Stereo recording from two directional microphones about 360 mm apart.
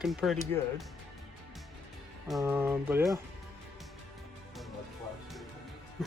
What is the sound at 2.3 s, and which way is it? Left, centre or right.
Speech, centre.